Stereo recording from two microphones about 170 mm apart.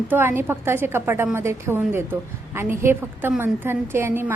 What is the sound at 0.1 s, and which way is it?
A woman's voice, 15° right (ahead or behind).